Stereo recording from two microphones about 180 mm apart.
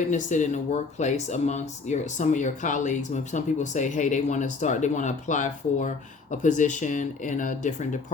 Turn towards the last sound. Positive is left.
turn(degrees=45)  # may be behind; listen again after turning